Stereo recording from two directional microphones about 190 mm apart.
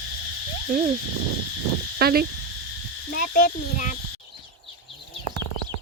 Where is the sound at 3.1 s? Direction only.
50° left (ahead or behind).